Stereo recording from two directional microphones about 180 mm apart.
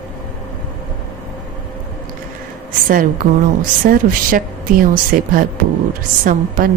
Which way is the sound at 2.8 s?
50° right (ahead or behind).